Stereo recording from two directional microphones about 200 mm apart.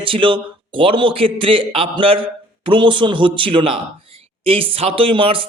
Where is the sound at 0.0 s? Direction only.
25° right (ahead or behind).